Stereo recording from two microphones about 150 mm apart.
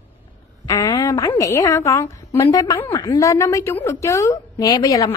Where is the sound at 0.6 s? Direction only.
25° left (ahead or behind).